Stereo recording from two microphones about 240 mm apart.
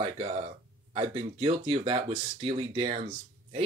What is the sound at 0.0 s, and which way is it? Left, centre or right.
Speech, right.